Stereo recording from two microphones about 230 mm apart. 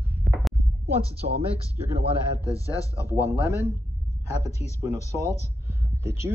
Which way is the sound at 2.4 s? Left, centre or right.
Centre.